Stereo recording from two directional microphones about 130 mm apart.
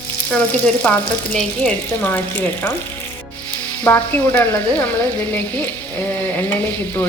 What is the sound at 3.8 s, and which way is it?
Frying, 15° left (ahead or behind).